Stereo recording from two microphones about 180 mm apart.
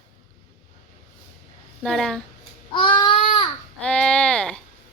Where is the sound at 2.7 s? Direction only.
30° left (ahead or behind).